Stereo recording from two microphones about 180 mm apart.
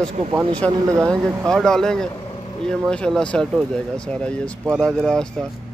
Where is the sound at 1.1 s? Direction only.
15° right (ahead or behind).